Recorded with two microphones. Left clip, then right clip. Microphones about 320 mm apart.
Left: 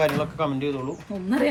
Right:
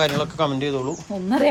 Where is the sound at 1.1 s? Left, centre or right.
Centre.